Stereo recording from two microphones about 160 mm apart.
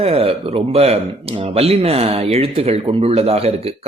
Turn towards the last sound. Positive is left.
turn(degrees=-40)  # may be behind; listen again after turning